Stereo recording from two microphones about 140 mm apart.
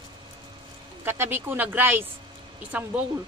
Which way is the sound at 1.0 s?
15° right (ahead or behind).